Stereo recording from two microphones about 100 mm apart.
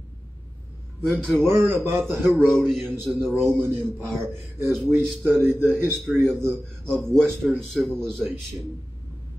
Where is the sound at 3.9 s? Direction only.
25° right (ahead or behind).